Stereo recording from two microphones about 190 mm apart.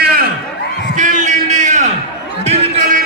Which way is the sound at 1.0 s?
40° right (ahead or behind).